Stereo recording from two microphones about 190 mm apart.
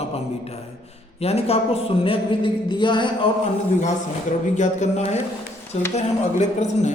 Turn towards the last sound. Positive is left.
turn(degrees=35)  # may be behind; listen again after turning